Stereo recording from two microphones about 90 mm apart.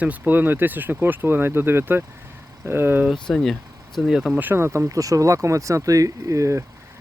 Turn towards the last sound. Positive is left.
turn(degrees=-35)  # may be behind; listen again after turning